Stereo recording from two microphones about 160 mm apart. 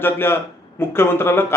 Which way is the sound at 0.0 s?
15° left (ahead or behind).